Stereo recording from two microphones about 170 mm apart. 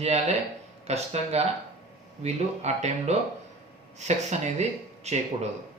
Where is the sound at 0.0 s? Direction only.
40° right (ahead or behind).